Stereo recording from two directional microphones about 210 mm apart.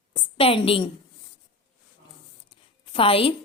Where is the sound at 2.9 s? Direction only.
25° left (ahead or behind).